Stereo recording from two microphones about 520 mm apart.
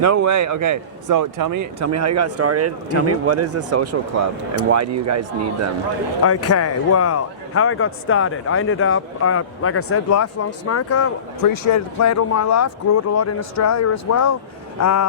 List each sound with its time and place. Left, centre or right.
0.0 s a man's voice: right
6.2 s a man's voice: left
11.4 s a man's voice: left